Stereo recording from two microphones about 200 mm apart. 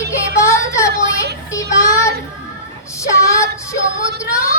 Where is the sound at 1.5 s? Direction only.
15° left (ahead or behind).